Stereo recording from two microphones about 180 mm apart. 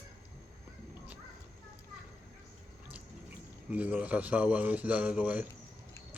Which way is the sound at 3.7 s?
10° right (ahead or behind).